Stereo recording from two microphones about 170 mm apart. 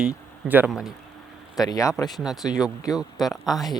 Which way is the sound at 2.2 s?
5° right (ahead or behind).